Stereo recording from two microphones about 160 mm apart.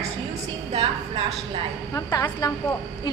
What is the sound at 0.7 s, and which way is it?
Speech, 35° right (ahead or behind).